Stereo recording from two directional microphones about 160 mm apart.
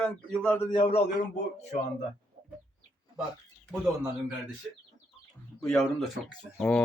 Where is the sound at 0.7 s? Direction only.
30° left (ahead or behind).